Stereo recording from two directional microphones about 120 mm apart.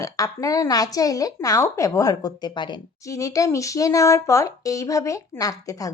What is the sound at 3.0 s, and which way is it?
A woman's voice, 25° left (ahead or behind).